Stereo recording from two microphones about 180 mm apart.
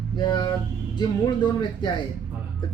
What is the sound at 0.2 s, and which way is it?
Speech, 25° left (ahead or behind).